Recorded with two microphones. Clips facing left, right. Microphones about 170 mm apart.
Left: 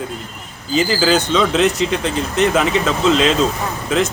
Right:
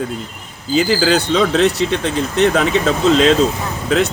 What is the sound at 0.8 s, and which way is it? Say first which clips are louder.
Speech: right 1 dB; 40° right (ahead or behind).